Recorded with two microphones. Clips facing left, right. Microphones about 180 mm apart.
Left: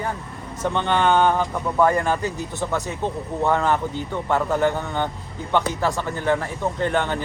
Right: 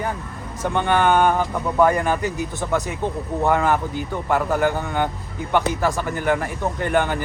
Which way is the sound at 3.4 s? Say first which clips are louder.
Right 1 dB; 10° right (ahead or behind).